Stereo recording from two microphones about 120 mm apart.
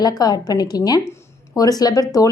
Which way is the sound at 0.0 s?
35° left (ahead or behind).